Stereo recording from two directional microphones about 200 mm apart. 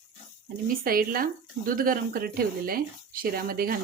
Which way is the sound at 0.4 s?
45° right (ahead or behind).